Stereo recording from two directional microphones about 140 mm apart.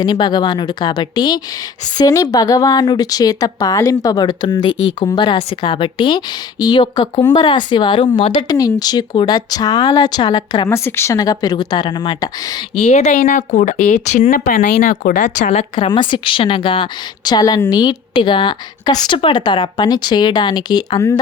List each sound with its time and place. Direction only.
0.0 s a woman's voice: 30° left (ahead or behind)
10.7 s a woman's voice: 15° left (ahead or behind)
12.8 s speech: 50° left (ahead or behind)
15.7 s speech: 35° left (ahead or behind)